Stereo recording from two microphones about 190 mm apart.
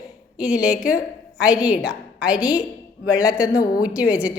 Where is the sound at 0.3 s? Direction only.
5° right (ahead or behind).